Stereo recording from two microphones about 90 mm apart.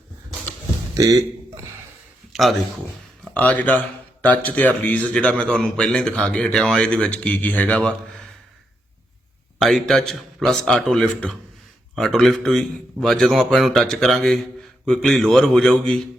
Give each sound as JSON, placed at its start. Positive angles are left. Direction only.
{"t": 0.9, "sound": "a man's voice", "side_deg": -40}
{"t": 2.3, "sound": "a man's voice", "side_deg": 0}
{"t": 3.3, "sound": "a man's voice", "side_deg": 15}
{"t": 9.6, "sound": "a man's voice", "side_deg": 0}